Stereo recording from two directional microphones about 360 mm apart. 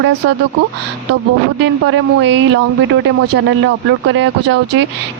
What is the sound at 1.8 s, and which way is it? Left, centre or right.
Speech, right.